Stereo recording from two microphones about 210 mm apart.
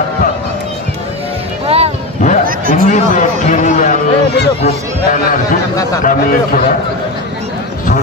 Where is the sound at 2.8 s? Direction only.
35° left (ahead or behind).